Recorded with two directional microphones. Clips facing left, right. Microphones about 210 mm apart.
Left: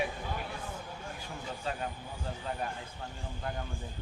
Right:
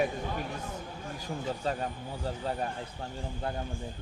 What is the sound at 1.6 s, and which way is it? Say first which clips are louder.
Speech: right 4 dB; 40° right (ahead or behind).